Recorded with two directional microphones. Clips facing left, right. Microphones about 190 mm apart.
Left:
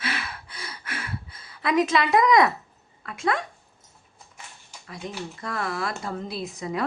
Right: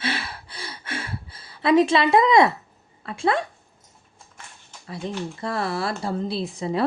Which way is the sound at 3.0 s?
30° right (ahead or behind).